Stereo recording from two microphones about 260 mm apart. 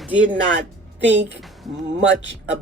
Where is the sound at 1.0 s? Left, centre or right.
Right.